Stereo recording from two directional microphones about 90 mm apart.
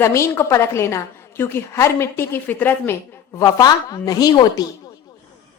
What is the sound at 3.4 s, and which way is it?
A woman's voice, 45° left (ahead or behind).